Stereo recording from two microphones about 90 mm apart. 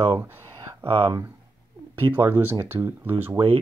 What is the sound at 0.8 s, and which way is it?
Speech, 90° right.